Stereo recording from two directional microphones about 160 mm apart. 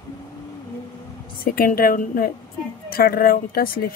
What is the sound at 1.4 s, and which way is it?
Speech, 65° left (ahead or behind).